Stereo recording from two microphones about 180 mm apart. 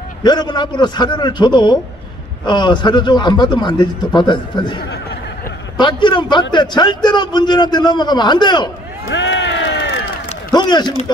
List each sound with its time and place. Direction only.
0.2 s a man's voice: 25° left (ahead or behind)
9.1 s a sound: 90° left
10.5 s a man's voice: 25° left (ahead or behind)